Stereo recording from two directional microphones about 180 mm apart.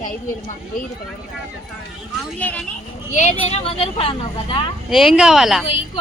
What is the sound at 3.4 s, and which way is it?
Speech, 30° left (ahead or behind).